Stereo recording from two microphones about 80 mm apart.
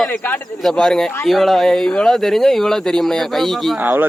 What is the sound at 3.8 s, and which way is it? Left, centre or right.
Speech, right.